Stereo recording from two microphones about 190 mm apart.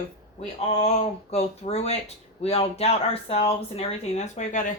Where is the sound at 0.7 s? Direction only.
35° left (ahead or behind).